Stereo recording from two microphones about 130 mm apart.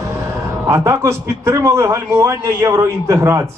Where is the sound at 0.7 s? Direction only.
25° right (ahead or behind).